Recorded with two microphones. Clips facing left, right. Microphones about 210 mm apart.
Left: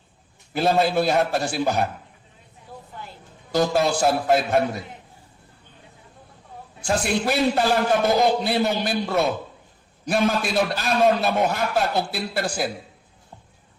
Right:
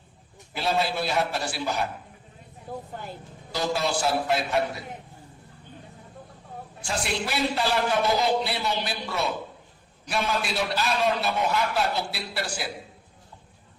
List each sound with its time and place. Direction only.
0.5 s a man's voice: 45° left (ahead or behind)
3.5 s a man's voice: 50° left (ahead or behind)
6.8 s a man's voice: 50° left (ahead or behind)